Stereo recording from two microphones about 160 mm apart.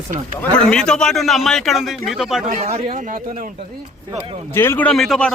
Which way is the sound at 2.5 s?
40° right (ahead or behind).